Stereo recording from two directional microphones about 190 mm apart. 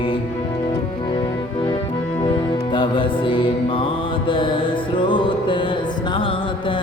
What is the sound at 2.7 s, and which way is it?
Music, 25° left (ahead or behind).